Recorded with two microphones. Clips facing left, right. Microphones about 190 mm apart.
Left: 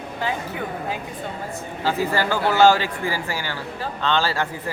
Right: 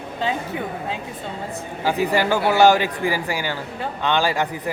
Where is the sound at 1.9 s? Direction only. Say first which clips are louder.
Right 3 dB; 15° right (ahead or behind).